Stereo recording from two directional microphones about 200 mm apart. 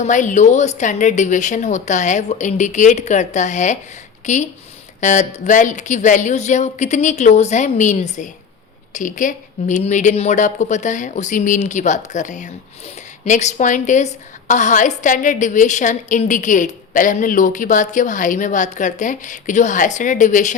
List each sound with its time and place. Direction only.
0.0 s a woman's voice: 35° left (ahead or behind)